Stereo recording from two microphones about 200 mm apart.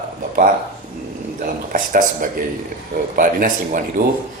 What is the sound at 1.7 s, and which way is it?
Speech, 40° right (ahead or behind).